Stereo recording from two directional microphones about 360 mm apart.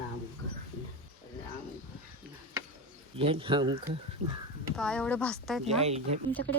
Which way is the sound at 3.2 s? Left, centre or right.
Centre.